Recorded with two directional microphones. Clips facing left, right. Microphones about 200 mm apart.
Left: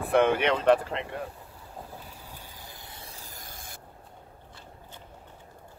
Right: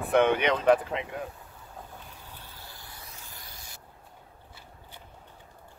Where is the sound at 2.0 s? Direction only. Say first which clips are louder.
Left 2 dB; 10° left (ahead or behind); by 3.7 s 50° left (ahead or behind).